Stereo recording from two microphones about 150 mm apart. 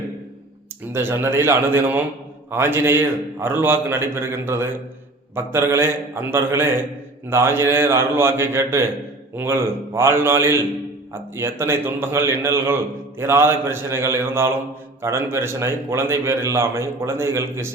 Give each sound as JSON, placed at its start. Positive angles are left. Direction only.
{"t": 0.9, "sound": "a man's voice", "side_deg": -15}